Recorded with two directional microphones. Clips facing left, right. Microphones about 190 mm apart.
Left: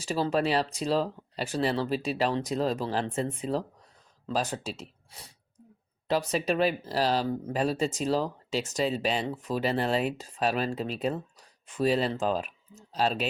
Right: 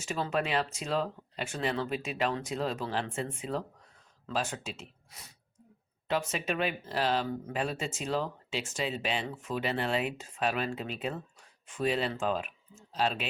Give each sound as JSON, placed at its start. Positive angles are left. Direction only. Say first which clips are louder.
{"t": 0.0, "sound": "speech", "louder": "left 5 dB", "side_deg": 35}